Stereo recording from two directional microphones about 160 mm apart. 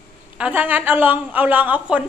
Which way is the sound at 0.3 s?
10° right (ahead or behind).